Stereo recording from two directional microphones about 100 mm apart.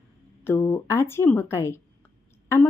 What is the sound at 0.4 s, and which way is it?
Speech, 25° left (ahead or behind).